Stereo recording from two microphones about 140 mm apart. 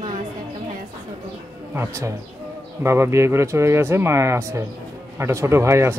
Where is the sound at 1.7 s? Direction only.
20° right (ahead or behind).